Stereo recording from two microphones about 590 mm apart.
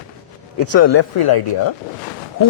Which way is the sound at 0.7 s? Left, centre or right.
Left.